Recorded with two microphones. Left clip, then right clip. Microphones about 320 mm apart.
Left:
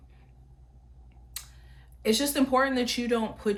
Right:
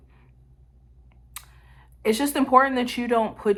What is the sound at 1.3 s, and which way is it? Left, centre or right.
Speech, centre.